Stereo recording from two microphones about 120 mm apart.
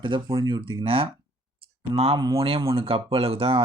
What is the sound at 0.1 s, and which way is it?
Speech, 45° right (ahead or behind).